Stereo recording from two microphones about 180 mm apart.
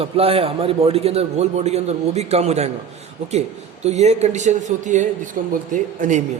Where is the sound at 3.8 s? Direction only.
40° right (ahead or behind).